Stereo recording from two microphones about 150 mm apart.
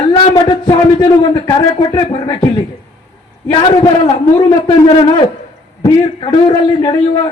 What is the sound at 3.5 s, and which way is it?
A man's voice, 35° left (ahead or behind).